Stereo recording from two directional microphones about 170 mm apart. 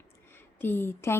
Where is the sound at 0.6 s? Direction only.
10° left (ahead or behind).